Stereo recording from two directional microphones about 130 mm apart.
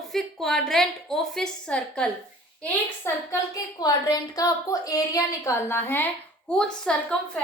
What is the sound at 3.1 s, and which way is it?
Speech, 20° left (ahead or behind).